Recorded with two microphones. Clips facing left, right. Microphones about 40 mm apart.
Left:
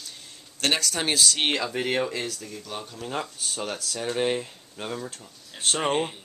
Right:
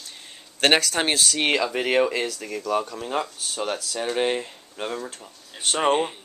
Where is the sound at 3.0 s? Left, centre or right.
Centre.